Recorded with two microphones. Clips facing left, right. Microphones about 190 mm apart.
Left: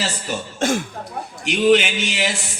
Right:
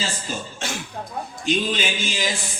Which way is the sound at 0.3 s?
70° left (ahead or behind).